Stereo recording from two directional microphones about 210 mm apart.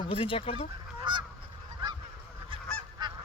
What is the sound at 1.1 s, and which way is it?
Goose, 20° right (ahead or behind).